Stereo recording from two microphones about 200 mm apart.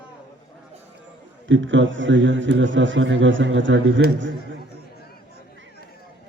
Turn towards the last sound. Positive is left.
turn(degrees=-70)  # may be behind; listen again after turning